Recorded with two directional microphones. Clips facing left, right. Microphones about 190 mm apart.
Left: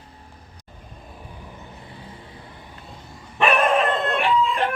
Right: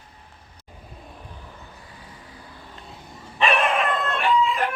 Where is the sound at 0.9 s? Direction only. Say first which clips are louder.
Left 2 dB; centre (ahead or behind); by 2.6 s 25° left (ahead or behind).